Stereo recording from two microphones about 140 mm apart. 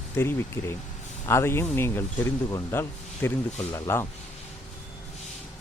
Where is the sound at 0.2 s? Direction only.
15° left (ahead or behind).